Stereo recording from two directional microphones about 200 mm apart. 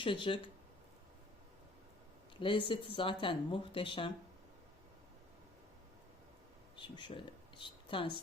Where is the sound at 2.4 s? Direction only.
25° left (ahead or behind).